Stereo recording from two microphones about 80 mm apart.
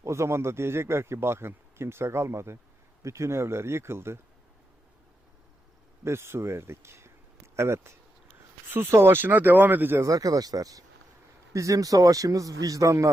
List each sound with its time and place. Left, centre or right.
0.0 s speech: right
6.1 s speech: right
10.0 s a man's voice: right